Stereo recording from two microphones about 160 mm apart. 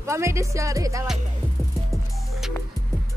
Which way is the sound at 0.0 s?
15° right (ahead or behind).